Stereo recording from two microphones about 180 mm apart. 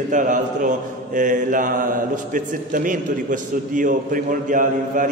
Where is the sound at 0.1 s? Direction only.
45° right (ahead or behind).